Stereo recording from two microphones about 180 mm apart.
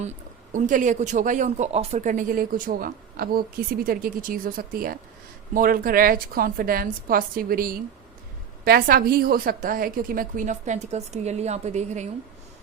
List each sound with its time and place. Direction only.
0.0 s speech: 45° right (ahead or behind)